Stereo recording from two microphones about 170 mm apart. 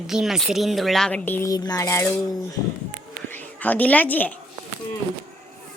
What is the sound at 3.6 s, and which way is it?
Speech, 10° left (ahead or behind).